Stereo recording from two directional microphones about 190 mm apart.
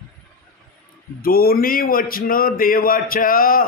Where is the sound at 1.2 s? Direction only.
50° left (ahead or behind).